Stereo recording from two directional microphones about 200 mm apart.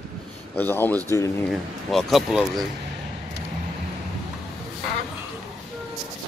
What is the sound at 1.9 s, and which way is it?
Speech, centre (ahead or behind).